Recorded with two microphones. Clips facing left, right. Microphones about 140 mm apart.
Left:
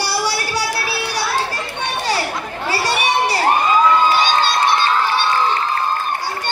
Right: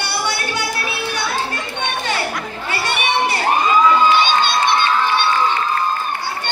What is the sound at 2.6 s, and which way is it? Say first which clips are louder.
Children playing: left 3 dB; 35° left (ahead or behind).